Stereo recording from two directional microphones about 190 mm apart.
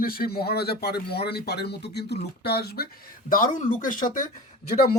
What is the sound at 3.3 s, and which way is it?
Speech, 45° left (ahead or behind).